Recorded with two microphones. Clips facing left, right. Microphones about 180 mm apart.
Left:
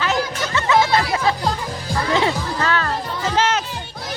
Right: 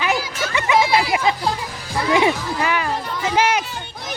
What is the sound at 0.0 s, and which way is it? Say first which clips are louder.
Music: left 1 dB; 15° right (ahead or behind).